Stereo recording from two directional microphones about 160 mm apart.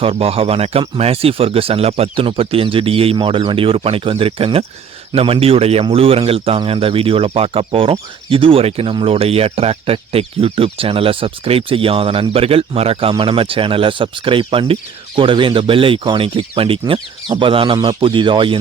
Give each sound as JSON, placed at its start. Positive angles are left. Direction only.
{"t": 0.0, "sound": "speech", "side_deg": -35}